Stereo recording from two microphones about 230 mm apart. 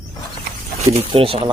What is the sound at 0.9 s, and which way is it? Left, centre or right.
Speech, right.